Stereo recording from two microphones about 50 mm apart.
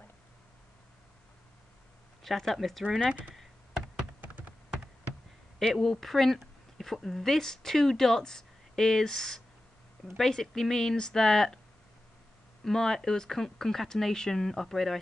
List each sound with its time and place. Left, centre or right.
2.2 s speech: centre
4.2 s computer keyboard: right
5.6 s speech: centre
12.6 s speech: centre